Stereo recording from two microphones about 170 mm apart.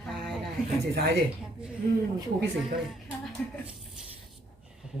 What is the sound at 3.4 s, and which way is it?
Speech, 5° left (ahead or behind).